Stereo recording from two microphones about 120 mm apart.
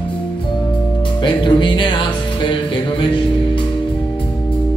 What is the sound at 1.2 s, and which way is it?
Music, 40° left (ahead or behind).